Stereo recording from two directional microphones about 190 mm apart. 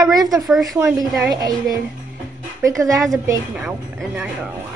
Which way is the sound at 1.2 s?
20° right (ahead or behind).